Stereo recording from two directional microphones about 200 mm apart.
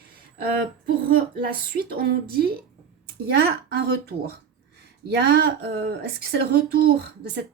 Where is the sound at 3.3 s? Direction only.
55° right (ahead or behind).